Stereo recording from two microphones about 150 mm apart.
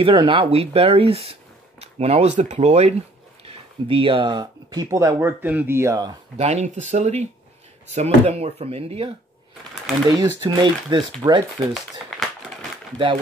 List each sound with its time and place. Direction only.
0.0 s speech: 35° right (ahead or behind)
6.3 s speech: 50° right (ahead or behind)
10.0 s speech: 30° right (ahead or behind)